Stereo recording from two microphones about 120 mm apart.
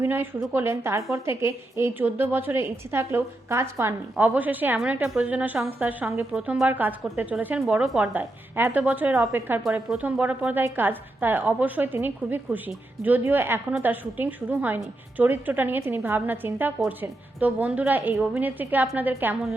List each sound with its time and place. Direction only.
0.0 s a woman's voice: 20° right (ahead or behind)